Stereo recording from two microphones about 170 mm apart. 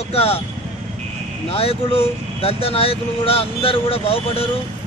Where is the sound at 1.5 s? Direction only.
35° left (ahead or behind).